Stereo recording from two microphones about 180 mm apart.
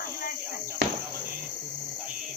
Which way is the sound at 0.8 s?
75° right (ahead or behind).